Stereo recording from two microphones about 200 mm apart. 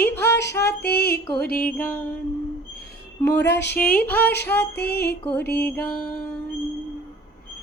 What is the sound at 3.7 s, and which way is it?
Mantra, 5° left (ahead or behind).